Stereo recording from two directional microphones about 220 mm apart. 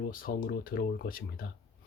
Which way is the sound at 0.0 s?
40° left (ahead or behind).